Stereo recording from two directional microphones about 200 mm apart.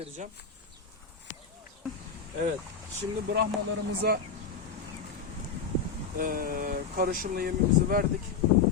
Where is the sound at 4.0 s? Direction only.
50° right (ahead or behind).